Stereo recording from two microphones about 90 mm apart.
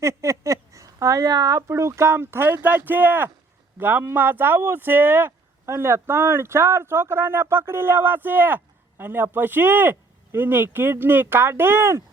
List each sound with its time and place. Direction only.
0.0 s speech: 30° right (ahead or behind)